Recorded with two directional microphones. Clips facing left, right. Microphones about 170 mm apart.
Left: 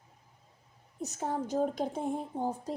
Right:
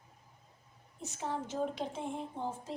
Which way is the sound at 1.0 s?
40° left (ahead or behind).